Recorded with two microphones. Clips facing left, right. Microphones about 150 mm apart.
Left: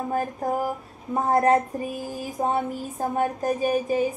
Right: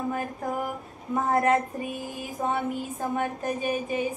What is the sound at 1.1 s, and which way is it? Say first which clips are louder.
Speech: left 3 dB; 35° left (ahead or behind).